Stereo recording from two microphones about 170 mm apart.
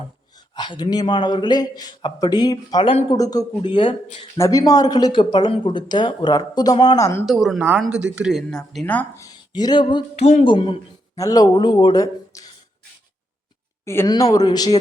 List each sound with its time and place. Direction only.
0.5 s speech: 25° left (ahead or behind)
4.4 s speech: 20° left (ahead or behind)
7.3 s speech: centre (ahead or behind)
8.9 s speech: 15° left (ahead or behind); by 10.5 s 40° left (ahead or behind)
10.5 s speech: 30° left (ahead or behind)
13.8 s speech: 15° left (ahead or behind)